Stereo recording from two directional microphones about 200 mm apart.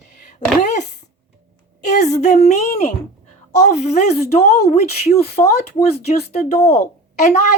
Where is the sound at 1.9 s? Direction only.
35° left (ahead or behind).